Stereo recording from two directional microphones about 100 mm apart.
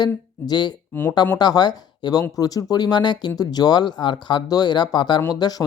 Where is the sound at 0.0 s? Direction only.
45° left (ahead or behind).